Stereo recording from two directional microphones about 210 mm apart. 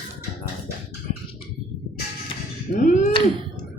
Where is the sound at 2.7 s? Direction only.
35° left (ahead or behind).